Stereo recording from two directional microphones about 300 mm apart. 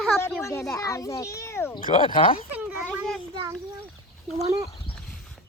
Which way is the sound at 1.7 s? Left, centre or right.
Left.